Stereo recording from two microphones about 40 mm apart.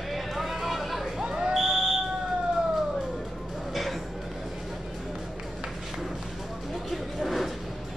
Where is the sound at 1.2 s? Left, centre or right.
Centre.